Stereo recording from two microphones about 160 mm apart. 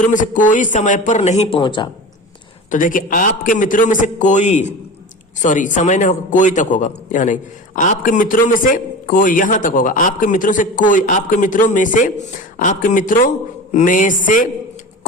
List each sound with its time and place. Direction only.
0.0 s a man's voice: 55° left (ahead or behind); by 1.9 s 30° left (ahead or behind)
2.6 s a man's voice: 55° left (ahead or behind)